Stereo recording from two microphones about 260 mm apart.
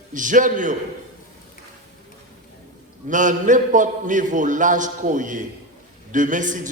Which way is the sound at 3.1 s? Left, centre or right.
Right.